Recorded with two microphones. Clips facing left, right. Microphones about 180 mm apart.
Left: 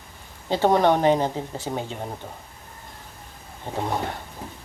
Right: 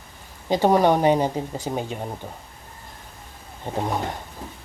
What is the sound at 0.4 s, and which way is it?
Speech, 15° right (ahead or behind).